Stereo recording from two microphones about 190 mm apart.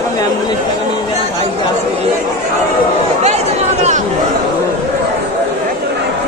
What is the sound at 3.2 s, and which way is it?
Chatter, 35° right (ahead or behind).